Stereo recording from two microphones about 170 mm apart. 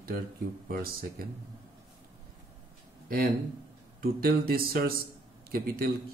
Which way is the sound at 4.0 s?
60° right (ahead or behind).